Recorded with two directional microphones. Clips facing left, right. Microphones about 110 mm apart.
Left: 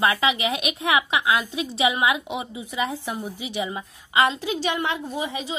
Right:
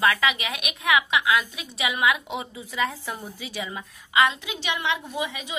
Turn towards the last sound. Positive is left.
turn(degrees=30)  # may be behind; listen again after turning